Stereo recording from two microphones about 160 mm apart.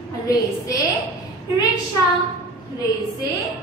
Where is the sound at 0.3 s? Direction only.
20° left (ahead or behind).